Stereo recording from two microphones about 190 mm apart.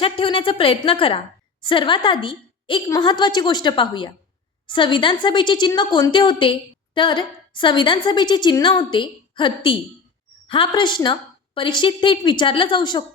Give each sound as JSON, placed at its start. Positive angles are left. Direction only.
{"t": 0.0, "sound": "a woman's voice", "side_deg": 30}